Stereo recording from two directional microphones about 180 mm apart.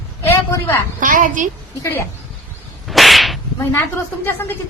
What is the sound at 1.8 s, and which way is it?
Speech, 15° left (ahead or behind).